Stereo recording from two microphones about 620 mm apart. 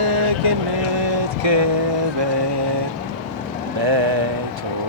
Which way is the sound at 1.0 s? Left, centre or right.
Right.